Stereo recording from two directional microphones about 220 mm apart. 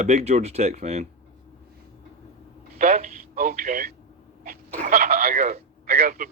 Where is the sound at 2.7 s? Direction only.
35° right (ahead or behind).